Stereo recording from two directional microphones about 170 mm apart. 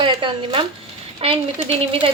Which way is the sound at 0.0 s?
30° right (ahead or behind).